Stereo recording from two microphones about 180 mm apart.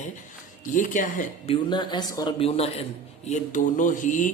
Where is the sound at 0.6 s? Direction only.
45° left (ahead or behind).